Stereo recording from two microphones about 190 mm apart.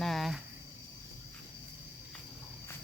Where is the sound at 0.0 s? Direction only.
Centre (ahead or behind).